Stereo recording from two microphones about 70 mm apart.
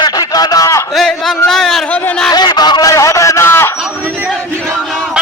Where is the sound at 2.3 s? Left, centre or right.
Left.